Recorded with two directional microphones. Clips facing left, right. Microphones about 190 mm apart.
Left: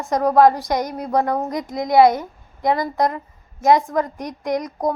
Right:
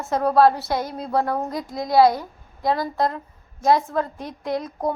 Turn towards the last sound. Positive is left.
turn(degrees=15)  # may be behind; listen again after turning